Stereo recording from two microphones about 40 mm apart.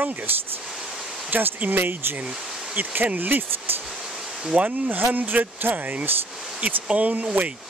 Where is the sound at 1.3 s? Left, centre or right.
Right.